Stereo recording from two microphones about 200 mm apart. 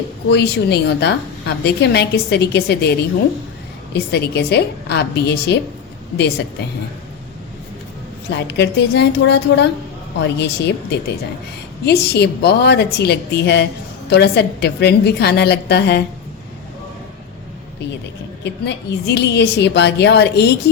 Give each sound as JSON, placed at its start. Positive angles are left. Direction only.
{"t": 0.3, "sound": "a woman's voice", "side_deg": 55}
{"t": 3.9, "sound": "a woman's voice", "side_deg": 55}
{"t": 8.4, "sound": "a woman's voice", "side_deg": 60}
{"t": 11.9, "sound": "a woman's voice", "side_deg": 55}
{"t": 18.4, "sound": "a woman's voice", "side_deg": 60}